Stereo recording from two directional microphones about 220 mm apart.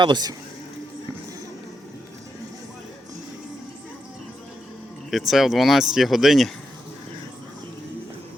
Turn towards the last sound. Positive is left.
turn(degrees=0)  # may be behind; listen again after turning